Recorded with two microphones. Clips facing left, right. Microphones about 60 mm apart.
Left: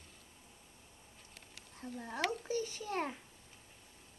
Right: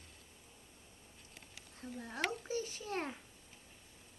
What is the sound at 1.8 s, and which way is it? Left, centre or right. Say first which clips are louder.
A woman's voice: left 2 dB; centre.